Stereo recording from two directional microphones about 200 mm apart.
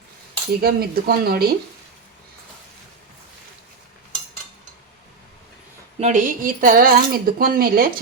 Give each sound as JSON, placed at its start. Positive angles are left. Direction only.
{"t": 0.6, "sound": "speech", "side_deg": -50}
{"t": 6.0, "sound": "speech", "side_deg": -40}